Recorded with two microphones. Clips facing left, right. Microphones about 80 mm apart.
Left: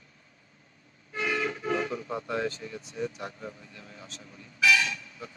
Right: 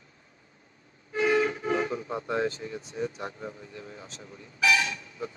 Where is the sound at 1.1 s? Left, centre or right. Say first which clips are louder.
Right 6 dB; right.